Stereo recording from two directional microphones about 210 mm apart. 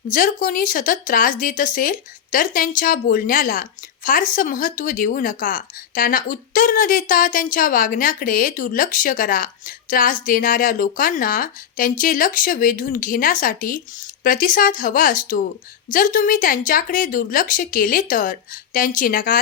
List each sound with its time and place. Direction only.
0.1 s speech: 40° left (ahead or behind)